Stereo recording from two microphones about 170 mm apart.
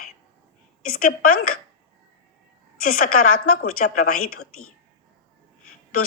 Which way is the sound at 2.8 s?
55° left (ahead or behind).